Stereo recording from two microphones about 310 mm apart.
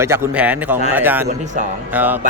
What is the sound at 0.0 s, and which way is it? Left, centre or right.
A man's voice, centre.